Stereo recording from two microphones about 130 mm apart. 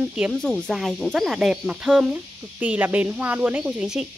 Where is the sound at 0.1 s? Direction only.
5° right (ahead or behind).